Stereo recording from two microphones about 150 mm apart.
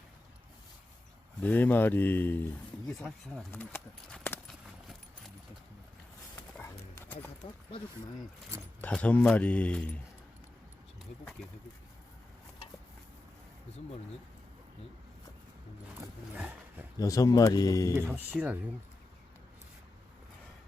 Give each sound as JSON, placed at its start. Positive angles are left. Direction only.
{"t": 1.4, "sound": "speech", "side_deg": 10}
{"t": 3.5, "sound": "speech", "side_deg": 15}
{"t": 4.4, "sound": "clip-clop", "side_deg": 0}
{"t": 6.6, "sound": "clip-clop", "side_deg": 15}
{"t": 8.8, "sound": "speech", "side_deg": 10}
{"t": 16.3, "sound": "dog", "side_deg": -10}
{"t": 17.0, "sound": "speech", "side_deg": 20}
{"t": 18.1, "sound": "speech", "side_deg": -10}